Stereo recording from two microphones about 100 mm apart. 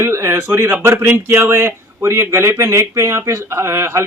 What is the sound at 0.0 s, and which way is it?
A man's voice, 25° right (ahead or behind).